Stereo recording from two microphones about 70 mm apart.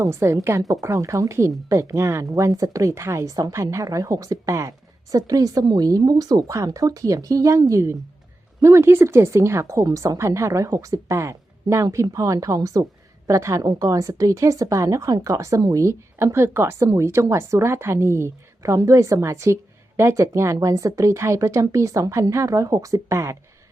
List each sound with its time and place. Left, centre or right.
0.0 s a woman's voice: right
5.1 s a woman's voice: right
6.7 s speech: right